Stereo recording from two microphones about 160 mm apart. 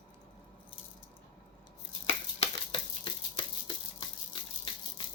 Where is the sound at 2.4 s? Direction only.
35° left (ahead or behind).